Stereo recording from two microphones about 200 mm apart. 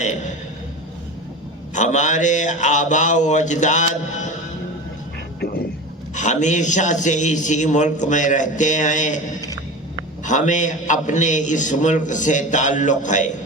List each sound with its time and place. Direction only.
1.7 s a man's voice: 35° left (ahead or behind)
5.4 s vehicle: 50° left (ahead or behind)
6.1 s a man's voice: 35° left (ahead or behind)
10.2 s a man's voice: 40° left (ahead or behind)